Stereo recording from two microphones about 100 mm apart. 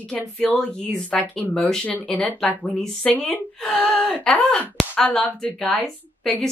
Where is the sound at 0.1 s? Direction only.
10° left (ahead or behind).